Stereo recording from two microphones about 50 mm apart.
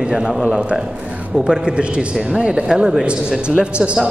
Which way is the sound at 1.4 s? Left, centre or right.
Right.